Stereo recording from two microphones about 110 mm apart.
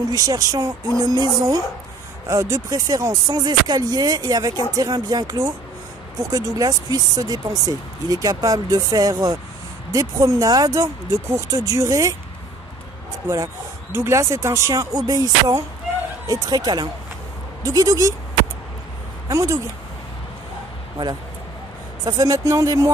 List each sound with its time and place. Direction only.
0.1 s speech: 35° right (ahead or behind)
13.9 s speech: 25° right (ahead or behind)
19.2 s speech: 30° right (ahead or behind)
22.0 s speech: 35° right (ahead or behind)